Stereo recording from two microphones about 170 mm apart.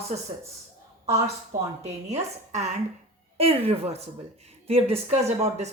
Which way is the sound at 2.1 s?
40° right (ahead or behind).